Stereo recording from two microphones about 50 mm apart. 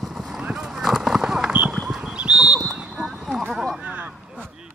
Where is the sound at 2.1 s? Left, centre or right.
Right.